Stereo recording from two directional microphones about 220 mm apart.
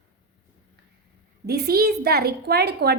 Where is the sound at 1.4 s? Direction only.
45° right (ahead or behind).